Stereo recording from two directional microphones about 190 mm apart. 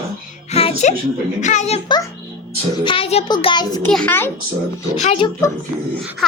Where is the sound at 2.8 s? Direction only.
30° left (ahead or behind).